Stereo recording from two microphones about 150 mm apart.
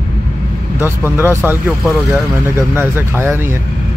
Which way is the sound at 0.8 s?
15° right (ahead or behind).